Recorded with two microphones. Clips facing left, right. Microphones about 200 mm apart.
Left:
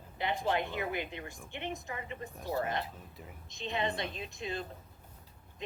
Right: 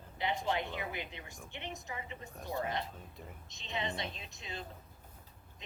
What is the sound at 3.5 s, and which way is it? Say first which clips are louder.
Speech: left 5 dB; 55° left (ahead or behind).